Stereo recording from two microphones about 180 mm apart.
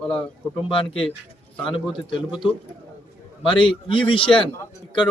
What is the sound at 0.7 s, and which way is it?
Speech, 30° left (ahead or behind).